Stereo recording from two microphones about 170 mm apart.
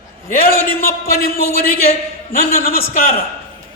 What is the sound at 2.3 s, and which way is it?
Speech, 60° left (ahead or behind).